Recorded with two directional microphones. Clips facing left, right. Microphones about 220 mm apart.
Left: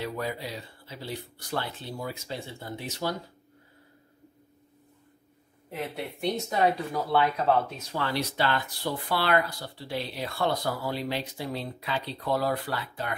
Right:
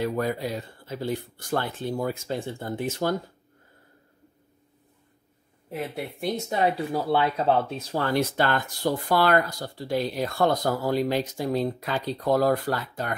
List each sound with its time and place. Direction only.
0.0 s speech: 50° right (ahead or behind)
6.9 s speech: 30° right (ahead or behind)
8.0 s speech: 50° right (ahead or behind)